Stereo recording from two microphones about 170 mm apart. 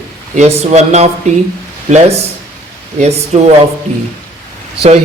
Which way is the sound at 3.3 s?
45° right (ahead or behind).